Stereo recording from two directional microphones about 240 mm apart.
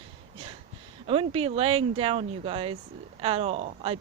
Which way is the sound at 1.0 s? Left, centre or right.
Right.